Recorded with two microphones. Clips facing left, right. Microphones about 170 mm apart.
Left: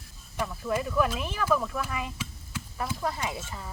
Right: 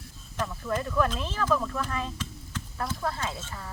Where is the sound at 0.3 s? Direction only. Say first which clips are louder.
Left 1 dB; 5° left (ahead or behind).